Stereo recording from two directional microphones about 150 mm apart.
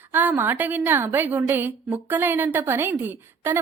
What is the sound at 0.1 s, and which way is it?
A woman's voice, 10° right (ahead or behind).